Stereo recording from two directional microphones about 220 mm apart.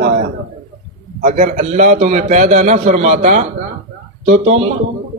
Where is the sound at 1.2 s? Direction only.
35° right (ahead or behind).